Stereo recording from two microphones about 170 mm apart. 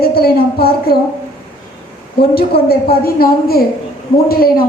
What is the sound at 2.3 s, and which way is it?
A woman's voice, 65° left (ahead or behind).